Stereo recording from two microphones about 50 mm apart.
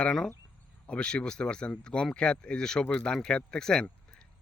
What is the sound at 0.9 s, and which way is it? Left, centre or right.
Speech, left.